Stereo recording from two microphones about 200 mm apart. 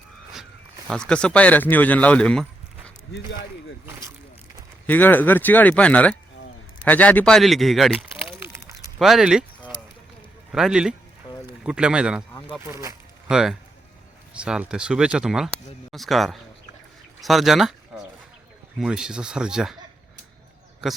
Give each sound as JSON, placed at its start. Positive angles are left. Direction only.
{"t": 0.9, "sound": "speech", "side_deg": 5}
{"t": 4.9, "sound": "speech", "side_deg": 10}
{"t": 9.0, "sound": "a sound", "side_deg": 0}
{"t": 10.5, "sound": "speech", "side_deg": -5}
{"t": 12.6, "sound": "speech", "side_deg": -15}
{"t": 13.2, "sound": "speech", "side_deg": -5}
{"t": 18.8, "sound": "speech", "side_deg": -5}